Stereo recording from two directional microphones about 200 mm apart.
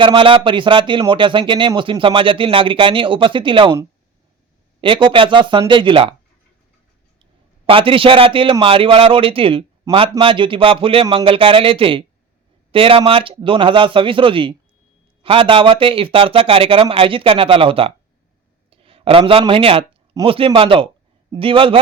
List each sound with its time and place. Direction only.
0.0 s a man's voice: 25° right (ahead or behind)
7.7 s a man's voice: 25° right (ahead or behind)